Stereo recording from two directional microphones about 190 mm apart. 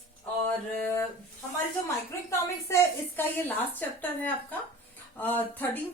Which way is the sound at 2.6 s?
10° left (ahead or behind).